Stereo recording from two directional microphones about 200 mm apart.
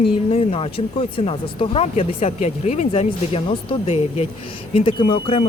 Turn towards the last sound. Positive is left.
turn(degrees=25)  # may be behind; listen again after turning